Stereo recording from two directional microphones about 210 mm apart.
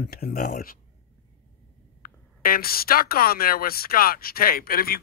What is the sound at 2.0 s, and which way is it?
Speech, 45° left (ahead or behind).